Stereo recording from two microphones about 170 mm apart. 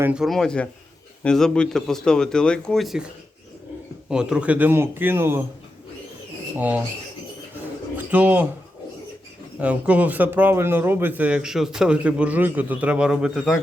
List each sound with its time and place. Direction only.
0.0 s speech: 5° right (ahead or behind)
4.1 s speech: 5° right (ahead or behind)
6.6 s speech: 10° right (ahead or behind)
7.9 s speech: 10° right (ahead or behind)
9.6 s speech: 5° right (ahead or behind)